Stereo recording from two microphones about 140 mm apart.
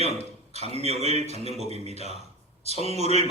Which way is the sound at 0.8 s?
50° right (ahead or behind).